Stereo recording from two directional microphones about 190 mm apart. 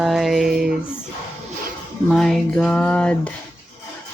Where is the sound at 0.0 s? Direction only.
Centre (ahead or behind).